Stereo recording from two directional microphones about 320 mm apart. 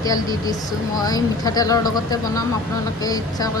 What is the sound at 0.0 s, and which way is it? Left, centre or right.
Speech, centre.